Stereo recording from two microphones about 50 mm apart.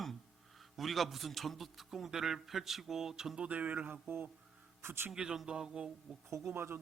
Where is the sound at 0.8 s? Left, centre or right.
Centre.